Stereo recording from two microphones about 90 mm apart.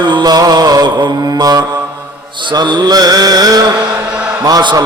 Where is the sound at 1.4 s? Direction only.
45° right (ahead or behind).